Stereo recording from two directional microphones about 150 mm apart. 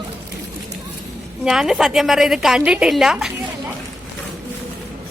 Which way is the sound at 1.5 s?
5° right (ahead or behind).